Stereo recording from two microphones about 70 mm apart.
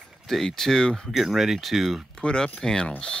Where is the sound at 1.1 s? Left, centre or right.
Centre.